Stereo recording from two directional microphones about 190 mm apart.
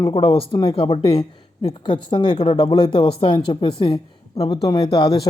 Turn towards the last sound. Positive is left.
turn(degrees=20)  # may be behind; listen again after turning